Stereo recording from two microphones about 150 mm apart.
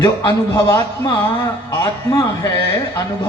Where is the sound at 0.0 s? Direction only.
25° left (ahead or behind).